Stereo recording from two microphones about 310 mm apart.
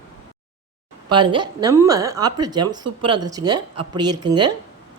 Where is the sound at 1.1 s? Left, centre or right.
Centre.